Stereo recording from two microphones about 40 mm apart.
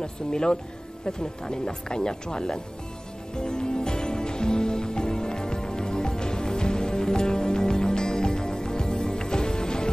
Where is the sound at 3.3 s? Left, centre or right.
Centre.